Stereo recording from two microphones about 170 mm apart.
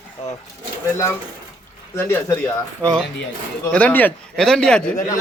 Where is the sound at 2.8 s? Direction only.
5° left (ahead or behind).